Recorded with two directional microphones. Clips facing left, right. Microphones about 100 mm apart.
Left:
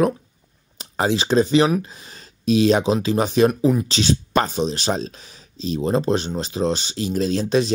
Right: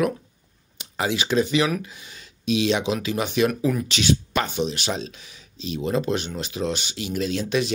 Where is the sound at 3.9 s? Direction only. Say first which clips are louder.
Left 1 dB; 35° left (ahead or behind).